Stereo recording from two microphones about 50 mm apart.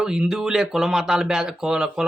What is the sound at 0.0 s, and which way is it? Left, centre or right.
Speech, centre.